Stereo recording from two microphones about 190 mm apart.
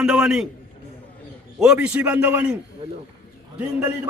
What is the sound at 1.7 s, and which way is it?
Speech, 10° right (ahead or behind).